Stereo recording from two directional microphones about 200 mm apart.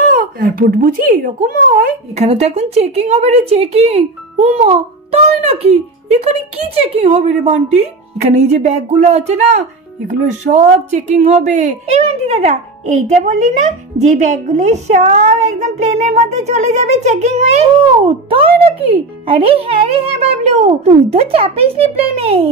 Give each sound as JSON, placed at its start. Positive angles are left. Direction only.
{"t": 0.1, "sound": "speech", "side_deg": -45}
{"t": 2.1, "sound": "a woman's voice", "side_deg": -30}